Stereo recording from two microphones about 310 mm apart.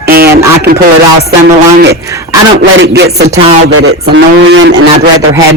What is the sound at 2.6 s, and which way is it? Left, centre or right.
Speech, right.